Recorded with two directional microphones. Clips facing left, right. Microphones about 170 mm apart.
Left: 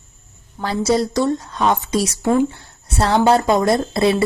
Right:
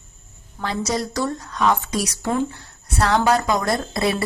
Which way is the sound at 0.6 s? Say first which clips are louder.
Left 6 dB; 30° left (ahead or behind).